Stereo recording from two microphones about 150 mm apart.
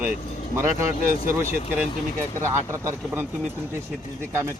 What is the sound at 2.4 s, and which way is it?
Speech, 15° right (ahead or behind).